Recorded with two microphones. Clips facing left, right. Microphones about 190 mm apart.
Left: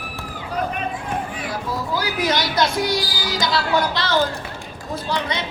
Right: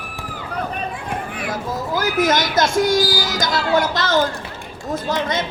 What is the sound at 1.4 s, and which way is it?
A man's voice, 45° right (ahead or behind).